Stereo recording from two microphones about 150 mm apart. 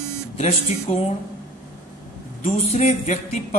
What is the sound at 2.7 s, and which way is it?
Speech, 45° left (ahead or behind).